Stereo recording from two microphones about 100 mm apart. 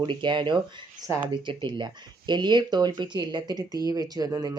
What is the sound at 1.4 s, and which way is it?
Speech, 55° right (ahead or behind).